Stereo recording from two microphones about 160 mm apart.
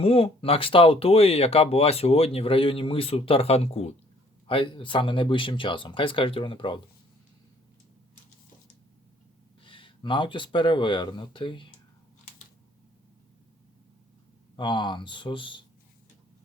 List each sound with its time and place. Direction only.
0.0 s speech: 40° left (ahead or behind)
9.6 s speech: 30° left (ahead or behind)
14.5 s speech: 30° left (ahead or behind)